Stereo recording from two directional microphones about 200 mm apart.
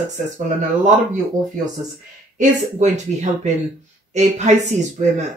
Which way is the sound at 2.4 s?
35° right (ahead or behind).